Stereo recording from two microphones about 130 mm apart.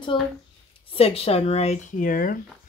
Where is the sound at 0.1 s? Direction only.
40° left (ahead or behind).